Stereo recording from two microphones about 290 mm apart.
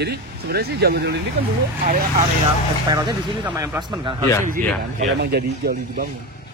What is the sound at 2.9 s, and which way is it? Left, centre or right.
Speech, centre.